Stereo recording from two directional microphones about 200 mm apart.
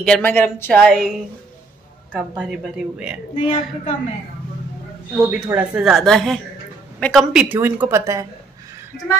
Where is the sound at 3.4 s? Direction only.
40° left (ahead or behind).